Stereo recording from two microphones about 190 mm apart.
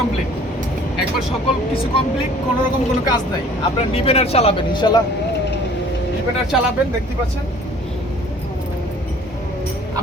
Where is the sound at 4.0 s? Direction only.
30° left (ahead or behind).